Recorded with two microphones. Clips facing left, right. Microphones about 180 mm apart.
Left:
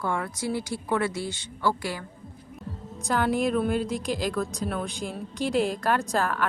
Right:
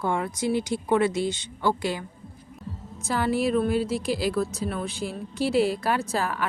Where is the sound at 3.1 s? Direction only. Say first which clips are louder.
Even; 5° right (ahead or behind).